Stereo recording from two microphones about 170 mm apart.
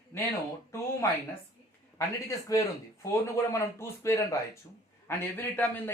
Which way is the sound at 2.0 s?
20° left (ahead or behind).